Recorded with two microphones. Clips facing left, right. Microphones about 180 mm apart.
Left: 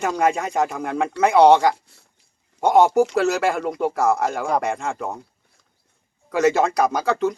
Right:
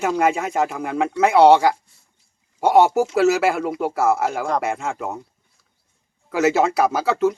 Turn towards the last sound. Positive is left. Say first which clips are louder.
# right 2 dB
turn(degrees=-5)  # may be behind; listen again after turning